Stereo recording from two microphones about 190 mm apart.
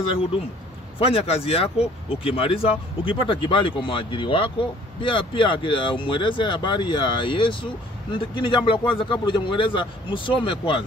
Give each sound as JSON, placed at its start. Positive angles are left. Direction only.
{"t": 0.9, "sound": "speech", "side_deg": 30}